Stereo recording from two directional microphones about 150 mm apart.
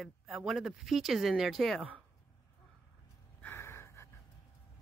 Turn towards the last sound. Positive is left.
turn(degrees=20)  # may be behind; listen again after turning